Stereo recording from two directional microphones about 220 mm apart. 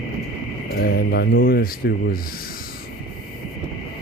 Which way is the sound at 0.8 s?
45° left (ahead or behind).